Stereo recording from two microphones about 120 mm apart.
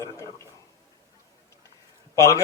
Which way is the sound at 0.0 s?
25° left (ahead or behind).